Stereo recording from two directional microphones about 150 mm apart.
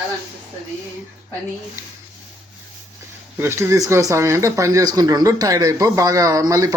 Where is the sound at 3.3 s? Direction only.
15° right (ahead or behind).